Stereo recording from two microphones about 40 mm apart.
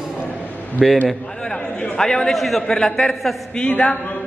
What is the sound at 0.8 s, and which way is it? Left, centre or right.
Speech, centre.